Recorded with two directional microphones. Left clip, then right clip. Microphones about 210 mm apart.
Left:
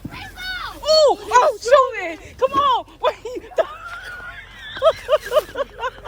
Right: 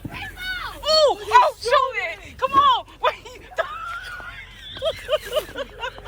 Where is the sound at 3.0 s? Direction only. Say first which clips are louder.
Left 2 dB; 25° left (ahead or behind).